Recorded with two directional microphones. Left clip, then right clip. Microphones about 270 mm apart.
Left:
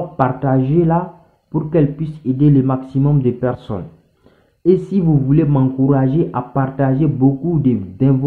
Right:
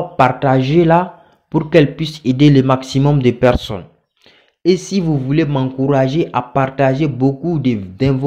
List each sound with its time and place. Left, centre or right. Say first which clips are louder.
0.2 s speech: right 5 dB; right
4.8 s speech: left 1 dB; right